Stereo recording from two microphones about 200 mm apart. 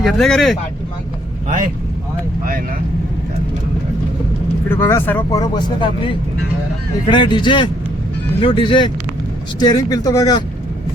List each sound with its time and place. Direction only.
0.0 s speech: centre (ahead or behind)
4.7 s speech: 10° left (ahead or behind)
5.4 s speech: 20° left (ahead or behind)